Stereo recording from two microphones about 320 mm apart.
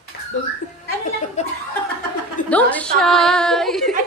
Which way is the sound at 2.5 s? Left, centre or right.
Centre.